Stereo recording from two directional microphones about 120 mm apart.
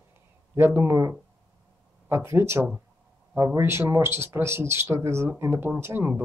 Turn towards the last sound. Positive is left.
turn(degrees=-20)  # may be behind; listen again after turning